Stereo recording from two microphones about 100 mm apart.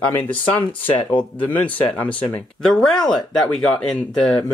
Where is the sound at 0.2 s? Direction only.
20° left (ahead or behind).